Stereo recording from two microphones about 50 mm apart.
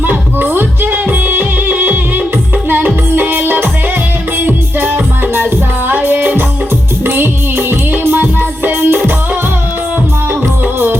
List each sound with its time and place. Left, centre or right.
0.0 s music: right